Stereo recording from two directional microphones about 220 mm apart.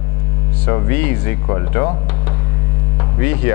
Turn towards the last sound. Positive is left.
turn(degrees=15)  # may be behind; listen again after turning